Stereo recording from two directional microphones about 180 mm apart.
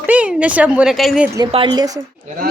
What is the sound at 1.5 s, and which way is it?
Speech, 30° right (ahead or behind).